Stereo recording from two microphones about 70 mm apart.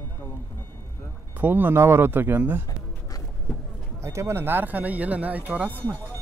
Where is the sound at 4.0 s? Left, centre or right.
Right.